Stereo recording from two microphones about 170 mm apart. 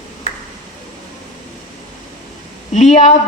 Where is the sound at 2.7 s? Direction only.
45° left (ahead or behind).